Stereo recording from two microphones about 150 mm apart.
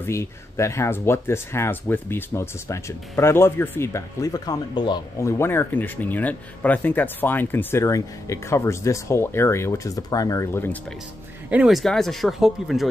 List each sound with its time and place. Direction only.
0.0 s speech: 20° left (ahead or behind)
5.2 s speech: 15° left (ahead or behind)
11.5 s speech: 5° right (ahead or behind)